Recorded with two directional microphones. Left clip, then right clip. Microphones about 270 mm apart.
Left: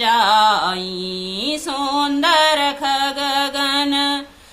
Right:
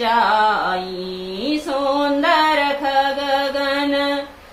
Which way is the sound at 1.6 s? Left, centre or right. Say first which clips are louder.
Right 2 dB; left.